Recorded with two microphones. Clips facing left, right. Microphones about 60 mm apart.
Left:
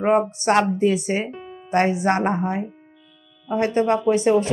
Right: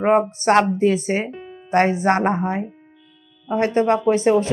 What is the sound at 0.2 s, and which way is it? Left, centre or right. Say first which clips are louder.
Speech: right 2 dB; right.